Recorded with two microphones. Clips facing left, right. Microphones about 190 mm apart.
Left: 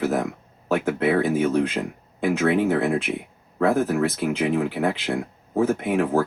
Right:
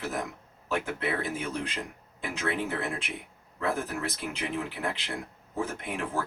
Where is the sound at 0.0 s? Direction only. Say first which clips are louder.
Left 10 dB; 60° left (ahead or behind).